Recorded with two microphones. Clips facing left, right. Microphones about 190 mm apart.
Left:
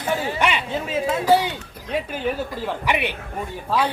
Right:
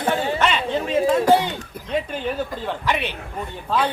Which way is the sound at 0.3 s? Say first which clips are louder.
Right 2 dB; 10° left (ahead or behind).